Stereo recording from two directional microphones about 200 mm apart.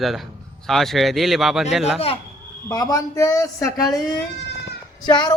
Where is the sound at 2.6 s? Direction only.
20° left (ahead or behind).